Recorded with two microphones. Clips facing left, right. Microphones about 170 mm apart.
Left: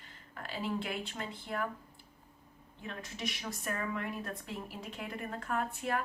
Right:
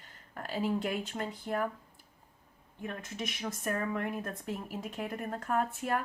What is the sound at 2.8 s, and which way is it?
A woman's voice, 50° right (ahead or behind).